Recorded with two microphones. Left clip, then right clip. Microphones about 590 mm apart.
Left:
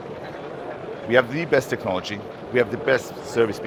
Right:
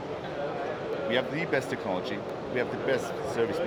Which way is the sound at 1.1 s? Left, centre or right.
Left.